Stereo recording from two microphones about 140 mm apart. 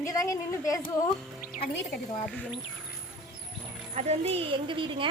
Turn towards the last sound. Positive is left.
turn(degrees=-35)  # may be behind; listen again after turning